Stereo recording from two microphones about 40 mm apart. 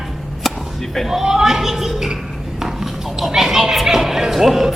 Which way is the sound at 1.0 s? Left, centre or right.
Centre.